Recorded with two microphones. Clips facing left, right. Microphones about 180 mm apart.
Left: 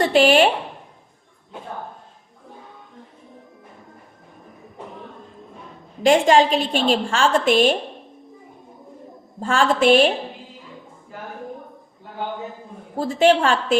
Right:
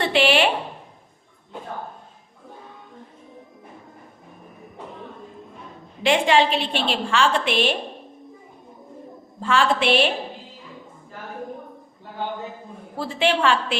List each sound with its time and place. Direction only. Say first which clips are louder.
0.0 s speech: left 4 dB; 45° left (ahead or behind)
6.0 s a woman's voice: left 4 dB; 45° left (ahead or behind)
9.4 s a woman's voice: left 3 dB; 45° left (ahead or behind)
13.0 s a woman's voice: left 5 dB; 45° left (ahead or behind)